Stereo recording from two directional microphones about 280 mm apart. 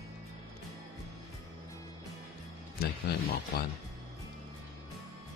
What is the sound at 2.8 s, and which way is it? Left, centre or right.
Speech, left.